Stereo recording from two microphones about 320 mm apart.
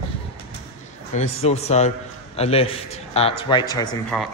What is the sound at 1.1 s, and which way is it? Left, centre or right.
A man's voice, centre.